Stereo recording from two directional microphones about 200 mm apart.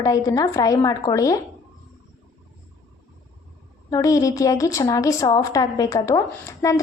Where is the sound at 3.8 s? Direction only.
15° left (ahead or behind).